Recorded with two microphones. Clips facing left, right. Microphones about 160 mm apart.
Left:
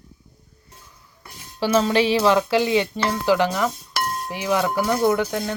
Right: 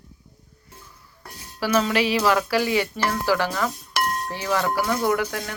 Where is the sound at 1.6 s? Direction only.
25° left (ahead or behind).